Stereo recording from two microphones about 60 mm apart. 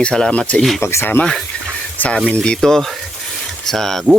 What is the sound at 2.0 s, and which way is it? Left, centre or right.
Speech, left.